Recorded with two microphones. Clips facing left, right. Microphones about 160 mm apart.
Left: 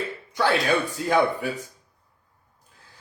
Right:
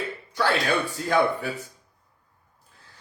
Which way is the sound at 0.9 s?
15° left (ahead or behind).